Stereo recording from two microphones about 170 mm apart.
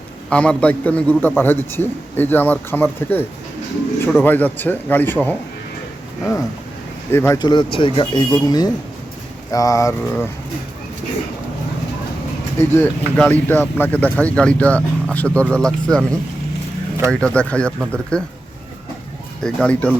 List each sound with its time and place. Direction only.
0.3 s speech: 5° left (ahead or behind)
7.1 s speech: 15° left (ahead or behind)
12.5 s speech: 15° left (ahead or behind)
17.1 s speech: 5° left (ahead or behind)
19.4 s speech: 5° left (ahead or behind)